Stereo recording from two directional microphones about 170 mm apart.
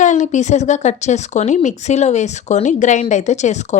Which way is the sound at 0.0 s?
45° left (ahead or behind).